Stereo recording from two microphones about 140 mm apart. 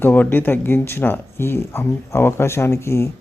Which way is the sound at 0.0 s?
15° left (ahead or behind).